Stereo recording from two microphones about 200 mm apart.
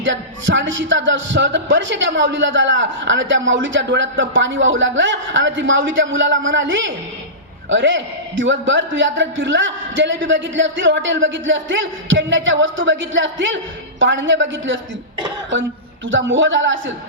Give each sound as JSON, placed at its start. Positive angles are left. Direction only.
{"t": 0.0, "sound": "speech", "side_deg": -70}
{"t": 16.0, "sound": "speech", "side_deg": -70}